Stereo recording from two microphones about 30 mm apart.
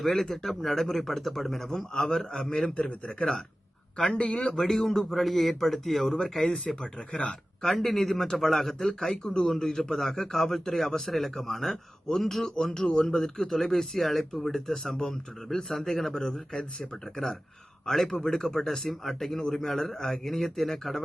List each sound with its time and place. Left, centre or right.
0.0 s speech: centre; by 4.5 s left
4.5 s speech: centre
9.2 s speech: left
9.5 s speech: centre
10.8 s speech: left
11.1 s speech: centre
12.4 s speech: left
18.9 s speech: centre